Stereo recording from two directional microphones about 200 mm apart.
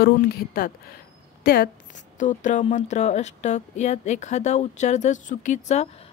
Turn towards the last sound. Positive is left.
turn(degrees=35)  # may be behind; listen again after turning